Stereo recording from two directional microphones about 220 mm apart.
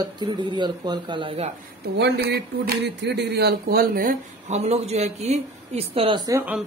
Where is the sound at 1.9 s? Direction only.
50° right (ahead or behind); by 6.5 s 15° right (ahead or behind).